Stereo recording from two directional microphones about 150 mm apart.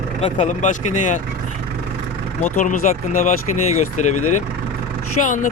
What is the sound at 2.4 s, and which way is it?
Speech, 60° left (ahead or behind).